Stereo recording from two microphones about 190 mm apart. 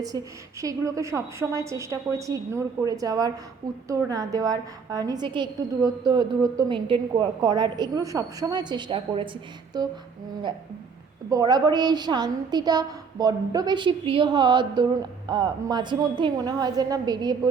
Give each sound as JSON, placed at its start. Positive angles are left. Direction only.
{"t": 0.1, "sound": "a woman's voice", "side_deg": 15}
{"t": 0.6, "sound": "a woman's voice", "side_deg": -15}
{"t": 11.3, "sound": "a woman's voice", "side_deg": -20}